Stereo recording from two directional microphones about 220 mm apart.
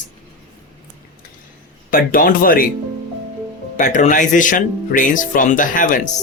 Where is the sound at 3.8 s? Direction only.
35° left (ahead or behind).